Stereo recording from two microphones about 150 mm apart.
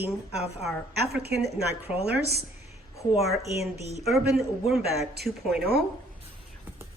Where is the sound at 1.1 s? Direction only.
90° right.